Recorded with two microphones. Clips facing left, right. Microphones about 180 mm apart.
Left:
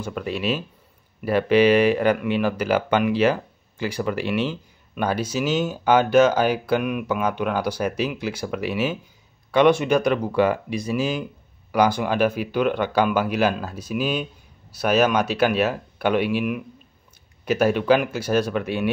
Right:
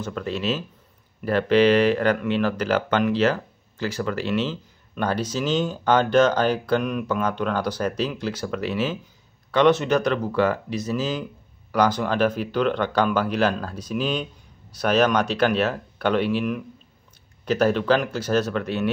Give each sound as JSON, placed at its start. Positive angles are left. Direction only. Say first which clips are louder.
{"t": 0.0, "sound": "speech", "louder": "left 1 dB", "side_deg": 10}